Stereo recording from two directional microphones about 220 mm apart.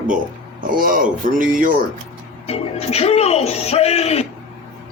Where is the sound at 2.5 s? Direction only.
30° left (ahead or behind).